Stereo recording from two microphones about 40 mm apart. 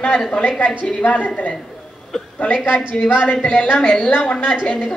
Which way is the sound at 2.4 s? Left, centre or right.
Left.